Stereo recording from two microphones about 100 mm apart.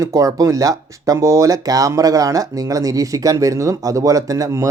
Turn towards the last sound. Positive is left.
turn(degrees=-30)  # may be behind; listen again after turning